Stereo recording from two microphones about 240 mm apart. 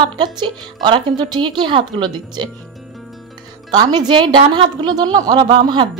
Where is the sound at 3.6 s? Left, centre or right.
Centre.